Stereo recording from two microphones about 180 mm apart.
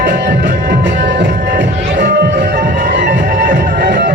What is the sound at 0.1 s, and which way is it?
Music, 65° right (ahead or behind).